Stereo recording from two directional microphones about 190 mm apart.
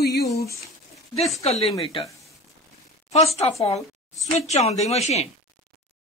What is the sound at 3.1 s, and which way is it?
Speech, 35° left (ahead or behind).